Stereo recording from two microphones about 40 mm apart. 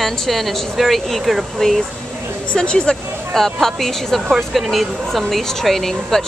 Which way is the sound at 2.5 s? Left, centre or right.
Left.